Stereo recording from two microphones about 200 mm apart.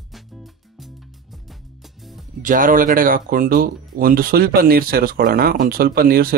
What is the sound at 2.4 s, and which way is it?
Speech, 45° right (ahead or behind).